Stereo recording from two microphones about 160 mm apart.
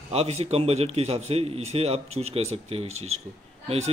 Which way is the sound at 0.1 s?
40° right (ahead or behind).